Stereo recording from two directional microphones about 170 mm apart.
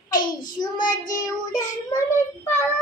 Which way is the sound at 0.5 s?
25° left (ahead or behind).